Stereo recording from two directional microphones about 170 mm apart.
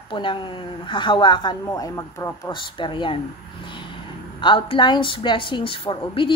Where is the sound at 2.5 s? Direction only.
30° left (ahead or behind).